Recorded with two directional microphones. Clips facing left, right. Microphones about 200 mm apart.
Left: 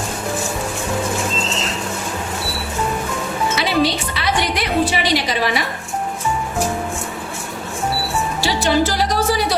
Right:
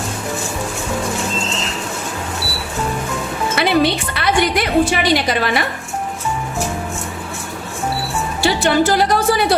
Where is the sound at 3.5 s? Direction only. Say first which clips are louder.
Right 4 dB; 55° right (ahead or behind).